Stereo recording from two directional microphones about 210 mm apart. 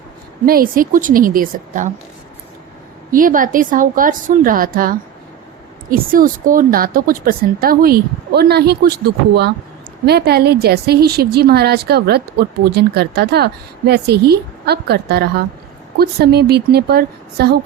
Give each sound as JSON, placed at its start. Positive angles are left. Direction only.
{"t": 0.4, "sound": "a woman's voice", "side_deg": -45}
{"t": 3.1, "sound": "a woman's voice", "side_deg": -40}